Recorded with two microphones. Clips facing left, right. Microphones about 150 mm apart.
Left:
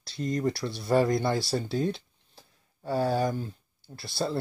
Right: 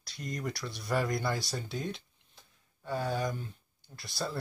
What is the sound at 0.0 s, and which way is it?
Speech, 25° left (ahead or behind).